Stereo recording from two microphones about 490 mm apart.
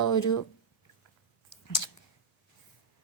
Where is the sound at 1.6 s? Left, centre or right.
Left.